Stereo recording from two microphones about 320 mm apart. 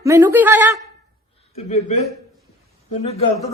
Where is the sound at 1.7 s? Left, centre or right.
Left.